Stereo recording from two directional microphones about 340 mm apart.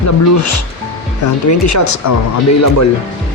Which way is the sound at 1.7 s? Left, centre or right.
Left.